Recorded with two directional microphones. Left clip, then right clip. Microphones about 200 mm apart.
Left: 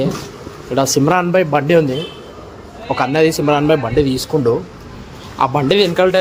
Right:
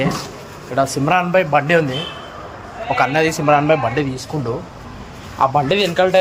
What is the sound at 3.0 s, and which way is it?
Speech, 30° left (ahead or behind).